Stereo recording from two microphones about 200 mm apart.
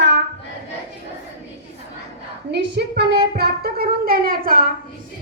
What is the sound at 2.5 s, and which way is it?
Speech, 60° right (ahead or behind).